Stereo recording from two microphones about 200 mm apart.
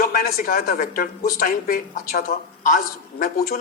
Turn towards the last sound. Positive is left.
turn(degrees=40)  # may be behind; listen again after turning